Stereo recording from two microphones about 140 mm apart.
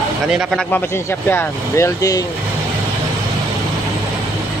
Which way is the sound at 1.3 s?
20° left (ahead or behind).